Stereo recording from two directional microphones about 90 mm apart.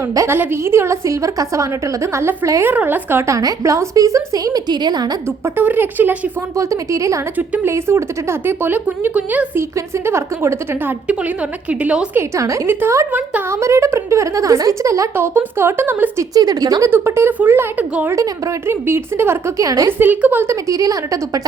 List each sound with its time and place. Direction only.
0.3 s a woman's voice: 25° right (ahead or behind)
3.2 s a woman's voice: 35° right (ahead or behind)
4.7 s speech: 55° right (ahead or behind)
5.5 s speech: 20° right (ahead or behind)
6.6 s a woman's voice: 35° right (ahead or behind); by 9.5 s 15° right (ahead or behind)
9.6 s speech: 30° right (ahead or behind)
11.7 s a woman's voice: 15° right (ahead or behind)
12.6 s a woman's voice: 30° right (ahead or behind)
16.3 s speech: 45° right (ahead or behind)
16.9 s speech: 25° right (ahead or behind)
19.6 s a woman's voice: 40° right (ahead or behind)
20.0 s a woman's voice: 20° right (ahead or behind); by 21.4 s 40° right (ahead or behind)